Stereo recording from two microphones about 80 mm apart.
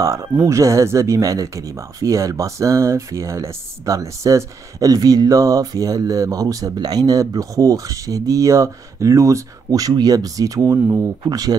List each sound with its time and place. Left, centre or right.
0.0 s speech: right